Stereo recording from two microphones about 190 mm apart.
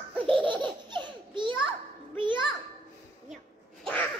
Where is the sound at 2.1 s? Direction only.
25° right (ahead or behind).